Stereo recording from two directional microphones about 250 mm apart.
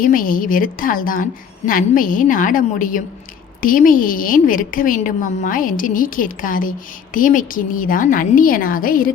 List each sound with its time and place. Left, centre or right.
0.0 s a woman's voice: left